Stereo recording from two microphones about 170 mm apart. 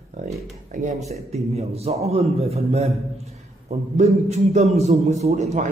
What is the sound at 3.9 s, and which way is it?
A man's voice, 40° right (ahead or behind).